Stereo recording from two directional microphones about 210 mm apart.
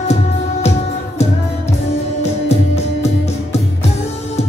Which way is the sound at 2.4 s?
30° left (ahead or behind).